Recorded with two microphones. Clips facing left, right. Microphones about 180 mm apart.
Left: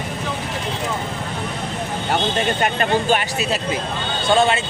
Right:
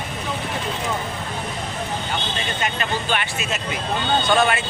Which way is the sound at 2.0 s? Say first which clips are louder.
Left 7 dB; 55° left (ahead or behind).